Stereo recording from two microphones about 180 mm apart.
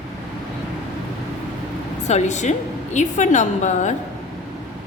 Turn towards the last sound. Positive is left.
turn(degrees=40)  # may be behind; listen again after turning